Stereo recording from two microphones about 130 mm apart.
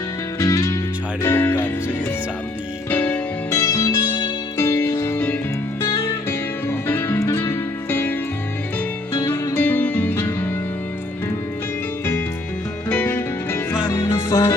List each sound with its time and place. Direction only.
0.3 s music: 25° left (ahead or behind)
2.9 s music: 15° left (ahead or behind)
9.1 s music: 20° left (ahead or behind)
12.9 s music: 15° left (ahead or behind)